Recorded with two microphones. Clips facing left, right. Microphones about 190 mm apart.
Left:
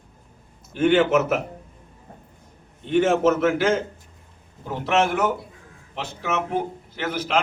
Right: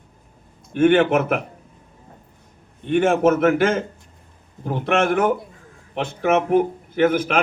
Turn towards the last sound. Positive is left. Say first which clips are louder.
# right 10 dB
turn(degrees=-55)  # may be behind; listen again after turning